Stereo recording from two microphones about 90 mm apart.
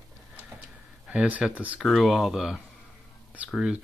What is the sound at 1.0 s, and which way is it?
Speech, 15° right (ahead or behind).